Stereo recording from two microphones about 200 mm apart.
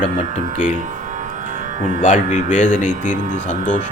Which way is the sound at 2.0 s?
40° left (ahead or behind).